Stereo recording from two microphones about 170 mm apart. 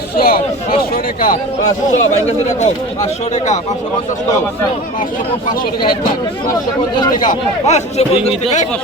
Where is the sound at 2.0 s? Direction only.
40° left (ahead or behind).